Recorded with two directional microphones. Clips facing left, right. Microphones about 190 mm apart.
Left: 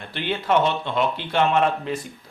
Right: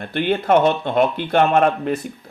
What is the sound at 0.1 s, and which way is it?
Speech, 50° right (ahead or behind).